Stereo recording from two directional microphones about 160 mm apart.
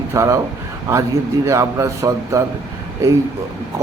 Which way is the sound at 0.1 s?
20° right (ahead or behind).